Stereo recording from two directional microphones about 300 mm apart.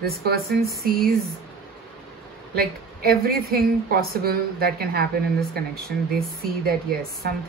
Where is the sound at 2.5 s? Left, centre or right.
Right.